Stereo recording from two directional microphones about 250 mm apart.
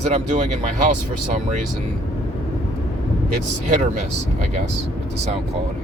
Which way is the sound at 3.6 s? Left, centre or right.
Right.